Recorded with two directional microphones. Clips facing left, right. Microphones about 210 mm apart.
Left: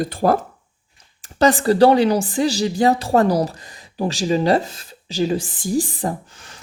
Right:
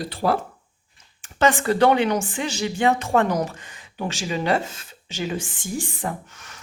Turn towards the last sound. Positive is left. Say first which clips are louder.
# left 4 dB
turn(degrees=30)  # may be behind; listen again after turning